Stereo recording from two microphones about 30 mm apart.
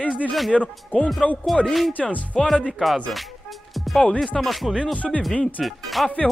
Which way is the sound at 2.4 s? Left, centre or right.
Centre.